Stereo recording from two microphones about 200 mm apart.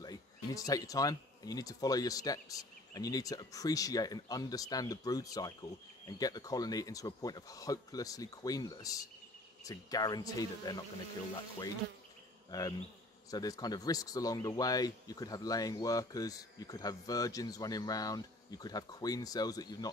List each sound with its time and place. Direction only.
0.0 s speech: 20° left (ahead or behind)
12.4 s bee: 20° left (ahead or behind)
13.3 s speech: 20° left (ahead or behind)